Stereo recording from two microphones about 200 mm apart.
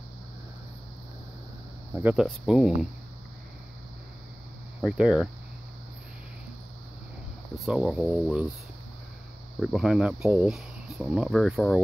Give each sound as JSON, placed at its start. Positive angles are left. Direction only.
{"t": 2.0, "sound": "speech", "side_deg": -5}
{"t": 4.8, "sound": "speech", "side_deg": -5}
{"t": 7.5, "sound": "speech", "side_deg": 0}
{"t": 9.6, "sound": "speech", "side_deg": -5}